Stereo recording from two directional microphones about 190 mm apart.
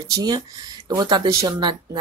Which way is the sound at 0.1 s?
20° right (ahead or behind).